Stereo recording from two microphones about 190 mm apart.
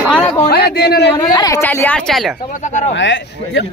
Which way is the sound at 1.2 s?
20° left (ahead or behind).